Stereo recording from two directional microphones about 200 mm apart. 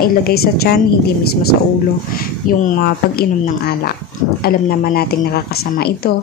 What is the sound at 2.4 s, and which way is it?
Speech, 45° left (ahead or behind).